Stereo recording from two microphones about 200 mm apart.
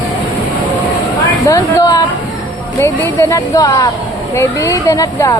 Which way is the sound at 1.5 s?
20° left (ahead or behind).